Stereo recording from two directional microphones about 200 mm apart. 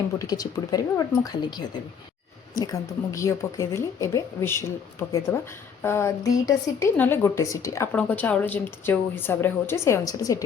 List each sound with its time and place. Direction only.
0.2 s a woman's voice: 20° left (ahead or behind)